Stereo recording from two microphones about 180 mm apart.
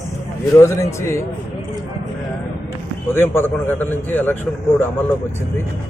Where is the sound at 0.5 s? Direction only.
15° left (ahead or behind).